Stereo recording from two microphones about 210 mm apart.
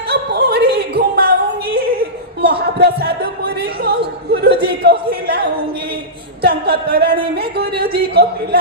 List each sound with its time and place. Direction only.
0.1 s a sound: 50° right (ahead or behind)
2.4 s music: 50° right (ahead or behind)
6.4 s speech: 45° right (ahead or behind)